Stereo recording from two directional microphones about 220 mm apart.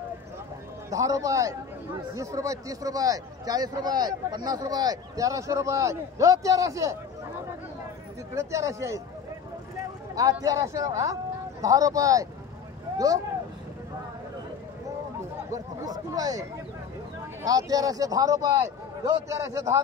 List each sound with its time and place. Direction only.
0.8 s a man's voice: 15° right (ahead or behind)
8.4 s a man's voice: 15° right (ahead or behind)
10.4 s a man's voice: 15° right (ahead or behind)
15.5 s a man's voice: 15° right (ahead or behind)